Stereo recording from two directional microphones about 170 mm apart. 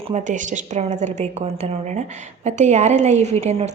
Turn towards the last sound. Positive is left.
turn(degrees=-40)  # may be behind; listen again after turning